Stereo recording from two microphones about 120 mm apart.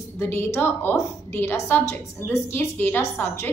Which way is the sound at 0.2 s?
20° left (ahead or behind).